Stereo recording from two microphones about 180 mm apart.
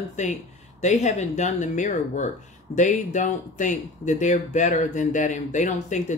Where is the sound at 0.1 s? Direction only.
40° left (ahead or behind).